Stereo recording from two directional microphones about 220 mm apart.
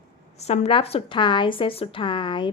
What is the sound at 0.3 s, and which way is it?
Speech, 30° left (ahead or behind).